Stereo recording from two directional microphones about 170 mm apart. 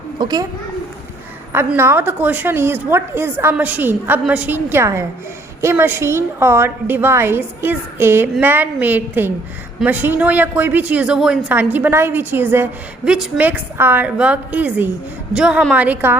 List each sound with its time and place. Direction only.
0.2 s a child's voice: 25° right (ahead or behind)
1.5 s a woman's voice: 15° right (ahead or behind)